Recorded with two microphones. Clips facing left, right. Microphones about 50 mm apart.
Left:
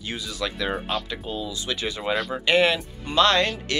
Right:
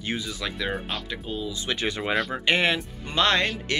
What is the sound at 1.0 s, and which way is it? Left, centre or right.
Speech, centre.